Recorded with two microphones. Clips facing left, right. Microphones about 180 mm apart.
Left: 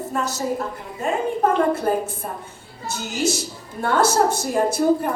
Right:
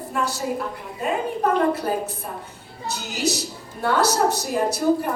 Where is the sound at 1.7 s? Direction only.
50° left (ahead or behind).